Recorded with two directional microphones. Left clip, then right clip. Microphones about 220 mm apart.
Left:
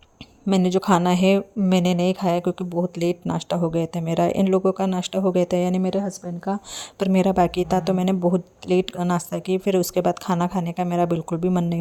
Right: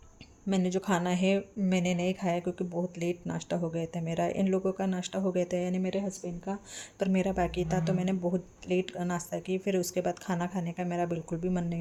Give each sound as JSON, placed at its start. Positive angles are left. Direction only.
{"t": 0.4, "sound": "speech", "side_deg": 40}